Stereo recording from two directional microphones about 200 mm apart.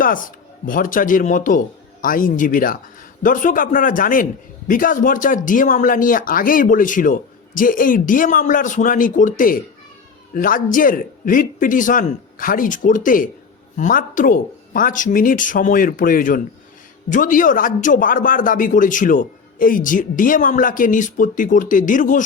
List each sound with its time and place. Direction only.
0.0 s a man's voice: 45° left (ahead or behind)